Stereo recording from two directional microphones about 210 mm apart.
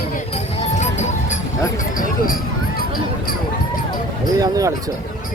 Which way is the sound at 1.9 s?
40° left (ahead or behind).